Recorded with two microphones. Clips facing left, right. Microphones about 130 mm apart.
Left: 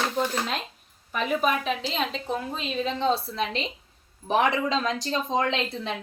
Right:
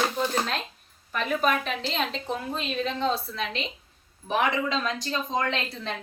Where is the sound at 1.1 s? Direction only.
10° left (ahead or behind).